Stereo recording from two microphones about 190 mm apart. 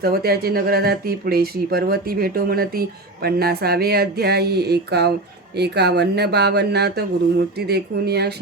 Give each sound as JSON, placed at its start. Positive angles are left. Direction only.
{"t": 0.0, "sound": "speech", "side_deg": -55}